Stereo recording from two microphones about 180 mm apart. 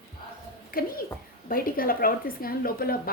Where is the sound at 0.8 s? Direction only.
55° left (ahead or behind).